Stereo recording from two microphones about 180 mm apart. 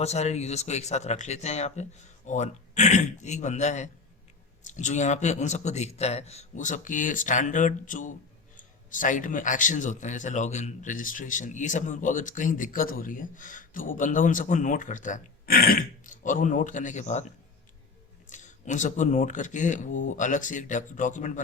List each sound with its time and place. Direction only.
0.0 s a man's voice: 35° left (ahead or behind)
18.3 s a man's voice: 45° left (ahead or behind)